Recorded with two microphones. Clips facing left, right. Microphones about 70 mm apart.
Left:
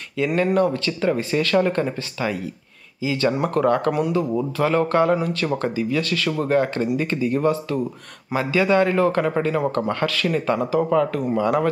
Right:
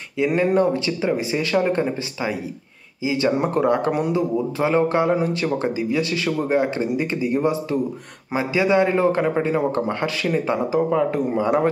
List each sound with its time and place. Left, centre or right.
0.3 s a man's voice: right